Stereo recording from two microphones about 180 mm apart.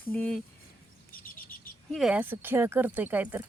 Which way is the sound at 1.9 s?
5° right (ahead or behind).